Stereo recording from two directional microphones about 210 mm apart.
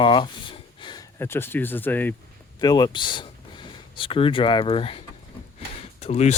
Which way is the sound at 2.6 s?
20° left (ahead or behind).